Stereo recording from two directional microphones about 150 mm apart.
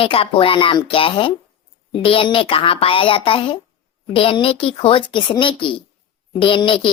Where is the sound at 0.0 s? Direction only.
40° left (ahead or behind).